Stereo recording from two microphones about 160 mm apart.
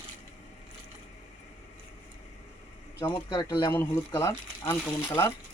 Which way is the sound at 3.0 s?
20° left (ahead or behind).